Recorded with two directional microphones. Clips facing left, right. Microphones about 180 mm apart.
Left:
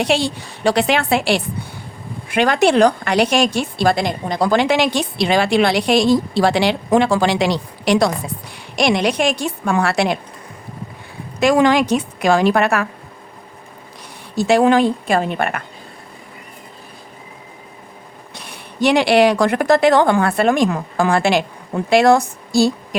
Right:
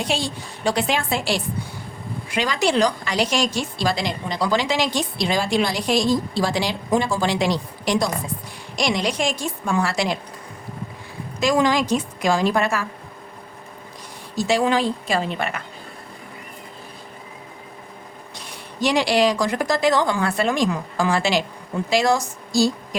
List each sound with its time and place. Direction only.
0.0 s a woman's voice: 70° left (ahead or behind)
11.3 s a woman's voice: 60° left (ahead or behind)
14.3 s a woman's voice: 60° left (ahead or behind)
18.3 s a woman's voice: 60° left (ahead or behind)